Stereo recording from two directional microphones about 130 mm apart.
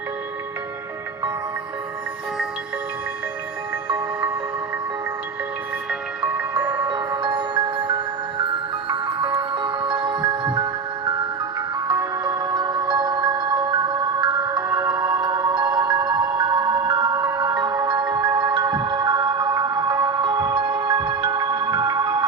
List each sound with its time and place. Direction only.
5.9 s music: 10° right (ahead or behind)
6.7 s marimba: 35° right (ahead or behind)
8.9 s music: 40° right (ahead or behind)
11.9 s music: 35° right (ahead or behind)